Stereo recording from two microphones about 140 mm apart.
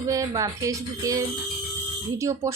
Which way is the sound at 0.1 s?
25° right (ahead or behind).